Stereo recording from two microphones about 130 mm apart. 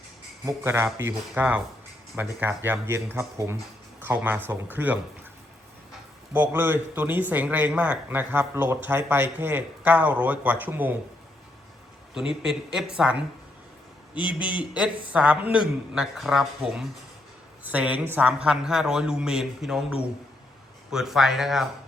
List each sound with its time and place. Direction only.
0.4 s speech: 20° right (ahead or behind)
6.3 s speech: 15° right (ahead or behind)
12.3 s a woman's voice: 5° right (ahead or behind)
14.3 s a woman's voice: 10° right (ahead or behind)